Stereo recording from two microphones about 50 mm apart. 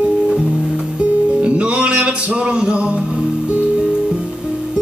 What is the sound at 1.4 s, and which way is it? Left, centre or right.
Music, right.